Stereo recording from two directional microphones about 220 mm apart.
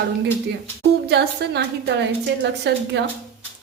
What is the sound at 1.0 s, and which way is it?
A woman's voice, 50° right (ahead or behind).